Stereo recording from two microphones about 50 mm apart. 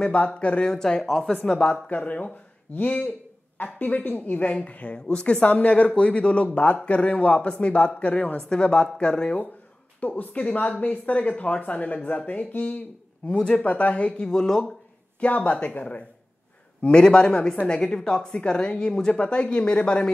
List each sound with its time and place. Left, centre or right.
0.0 s a woman's voice: left
1.0 s speech: centre
1.9 s a woman's voice: left
9.9 s a woman's voice: left; by 14.6 s centre
15.1 s a woman's voice: left